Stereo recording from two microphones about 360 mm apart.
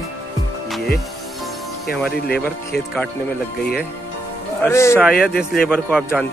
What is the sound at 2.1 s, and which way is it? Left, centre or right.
Speech, left.